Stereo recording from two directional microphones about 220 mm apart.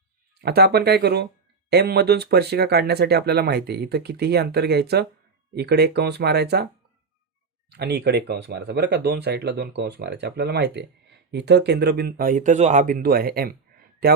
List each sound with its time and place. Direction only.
0.4 s speech: 45° right (ahead or behind)
7.7 s speech: 50° right (ahead or behind)